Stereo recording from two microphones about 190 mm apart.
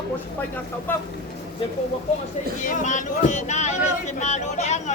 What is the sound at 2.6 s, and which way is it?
Speech, 40° left (ahead or behind).